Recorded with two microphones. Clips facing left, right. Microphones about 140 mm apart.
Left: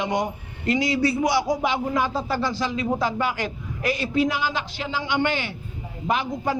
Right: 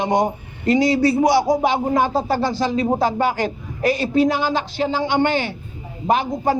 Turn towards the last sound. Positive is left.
turn(degrees=-35)  # may be behind; listen again after turning